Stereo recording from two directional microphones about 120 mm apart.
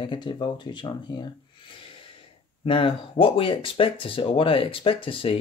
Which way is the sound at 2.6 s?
45° left (ahead or behind).